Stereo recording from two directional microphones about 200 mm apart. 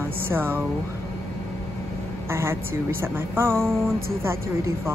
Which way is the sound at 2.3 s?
10° right (ahead or behind).